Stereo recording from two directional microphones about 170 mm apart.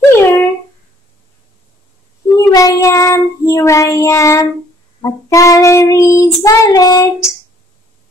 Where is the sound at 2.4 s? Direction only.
20° left (ahead or behind).